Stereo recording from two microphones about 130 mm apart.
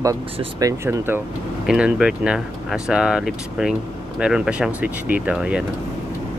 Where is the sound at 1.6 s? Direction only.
5° right (ahead or behind).